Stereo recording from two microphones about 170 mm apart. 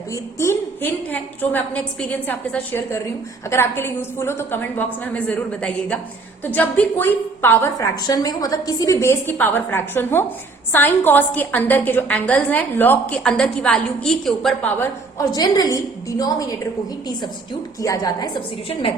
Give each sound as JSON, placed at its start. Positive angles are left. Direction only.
{"t": 0.1, "sound": "a woman's voice", "side_deg": 15}
{"t": 14.8, "sound": "a woman's voice", "side_deg": 20}
{"t": 17.7, "sound": "a woman's voice", "side_deg": 20}